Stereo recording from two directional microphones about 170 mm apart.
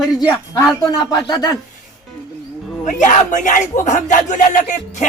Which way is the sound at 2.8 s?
50° left (ahead or behind).